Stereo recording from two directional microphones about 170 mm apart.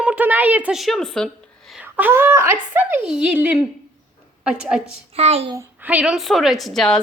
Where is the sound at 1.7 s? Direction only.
10° right (ahead or behind).